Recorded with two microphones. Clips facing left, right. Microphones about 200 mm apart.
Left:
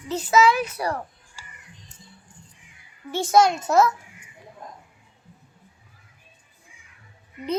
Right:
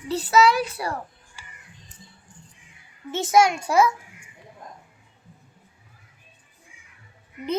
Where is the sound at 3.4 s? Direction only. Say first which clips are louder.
Left 1 dB; 10° right (ahead or behind).